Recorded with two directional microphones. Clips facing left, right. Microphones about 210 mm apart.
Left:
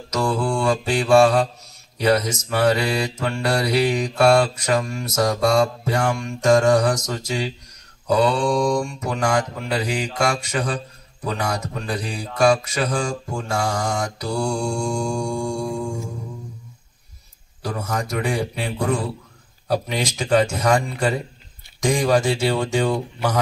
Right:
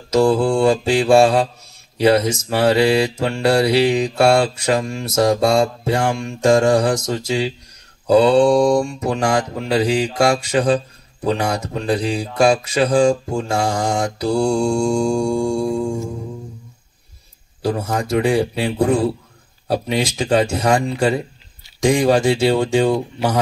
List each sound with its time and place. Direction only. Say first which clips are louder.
0.1 s mantra: right 7 dB; 30° right (ahead or behind)
17.6 s mantra: right 6 dB; 30° right (ahead or behind)
22.0 s mantra: right 3 dB; 30° right (ahead or behind)